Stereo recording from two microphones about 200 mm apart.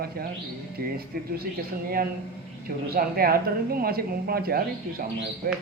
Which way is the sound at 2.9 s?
50° right (ahead or behind).